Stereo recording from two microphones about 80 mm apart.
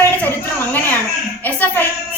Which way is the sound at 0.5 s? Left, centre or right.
Left.